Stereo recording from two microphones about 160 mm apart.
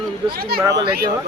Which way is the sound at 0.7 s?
25° right (ahead or behind).